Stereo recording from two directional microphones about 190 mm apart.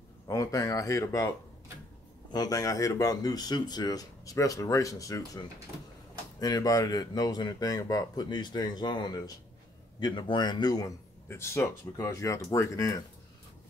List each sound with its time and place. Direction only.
0.3 s speech: 20° left (ahead or behind)
2.3 s speech: 20° left (ahead or behind)